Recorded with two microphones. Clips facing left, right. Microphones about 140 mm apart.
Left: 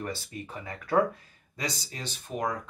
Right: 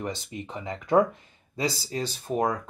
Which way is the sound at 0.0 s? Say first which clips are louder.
Right 3 dB; 20° right (ahead or behind).